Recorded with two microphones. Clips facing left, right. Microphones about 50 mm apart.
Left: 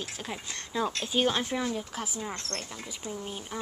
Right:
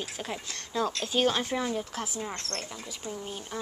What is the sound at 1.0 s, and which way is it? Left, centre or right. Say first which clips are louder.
Speech: right 1 dB; centre.